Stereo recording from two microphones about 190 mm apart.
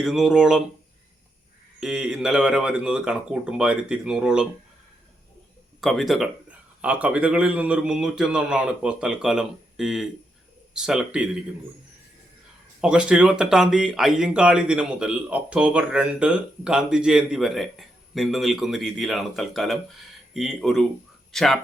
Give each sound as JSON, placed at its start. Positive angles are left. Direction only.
{"t": 0.0, "sound": "speech", "side_deg": 0}
{"t": 1.8, "sound": "speech", "side_deg": -5}
{"t": 5.8, "sound": "speech", "side_deg": 0}
{"t": 12.8, "sound": "speech", "side_deg": -5}